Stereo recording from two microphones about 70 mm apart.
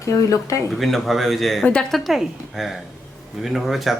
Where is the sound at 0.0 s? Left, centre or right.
Left.